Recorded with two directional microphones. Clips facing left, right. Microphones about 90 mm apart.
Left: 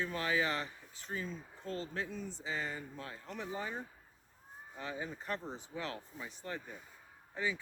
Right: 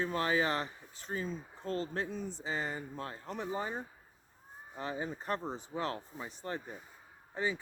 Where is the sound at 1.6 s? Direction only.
40° right (ahead or behind).